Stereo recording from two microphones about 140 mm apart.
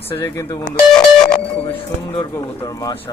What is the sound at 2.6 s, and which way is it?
Speech, 25° left (ahead or behind).